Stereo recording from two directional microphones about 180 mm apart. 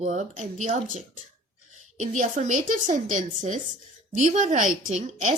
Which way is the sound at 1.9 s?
40° right (ahead or behind).